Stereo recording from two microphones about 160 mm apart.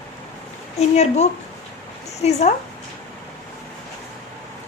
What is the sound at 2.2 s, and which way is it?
Speech, 40° left (ahead or behind).